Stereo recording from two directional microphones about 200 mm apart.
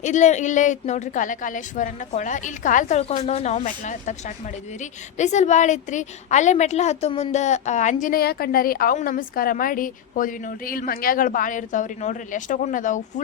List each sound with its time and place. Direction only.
0.0 s a woman's voice: 35° left (ahead or behind)
5.1 s a woman's voice: 35° left (ahead or behind)